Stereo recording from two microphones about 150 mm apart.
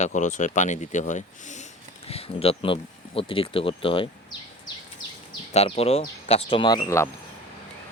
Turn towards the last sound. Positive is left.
turn(degrees=20)  # may be behind; listen again after turning